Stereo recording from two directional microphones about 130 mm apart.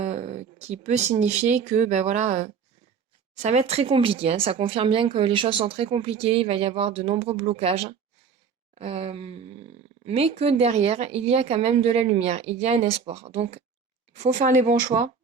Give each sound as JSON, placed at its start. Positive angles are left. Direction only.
{"t": 0.0, "sound": "speech", "side_deg": -60}
{"t": 14.2, "sound": "speech", "side_deg": -65}